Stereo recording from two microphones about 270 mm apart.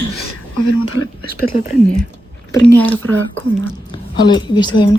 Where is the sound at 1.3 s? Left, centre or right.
Left.